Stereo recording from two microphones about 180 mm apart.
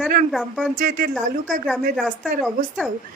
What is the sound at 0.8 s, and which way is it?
Speech, 50° right (ahead or behind).